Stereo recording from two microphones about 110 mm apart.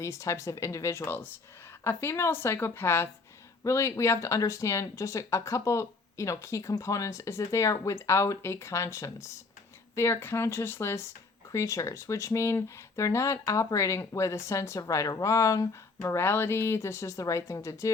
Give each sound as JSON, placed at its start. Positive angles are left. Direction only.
{"t": 0.0, "sound": "speech", "side_deg": 25}